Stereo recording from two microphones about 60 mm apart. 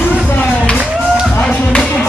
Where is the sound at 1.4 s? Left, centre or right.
Centre.